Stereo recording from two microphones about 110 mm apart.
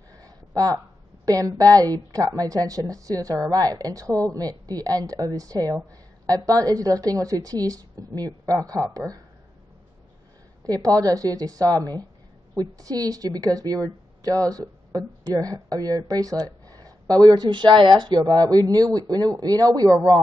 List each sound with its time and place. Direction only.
0.2 s a sound: 35° right (ahead or behind)
1.2 s a woman's voice: 35° right (ahead or behind)
10.6 s a woman's voice: 30° right (ahead or behind)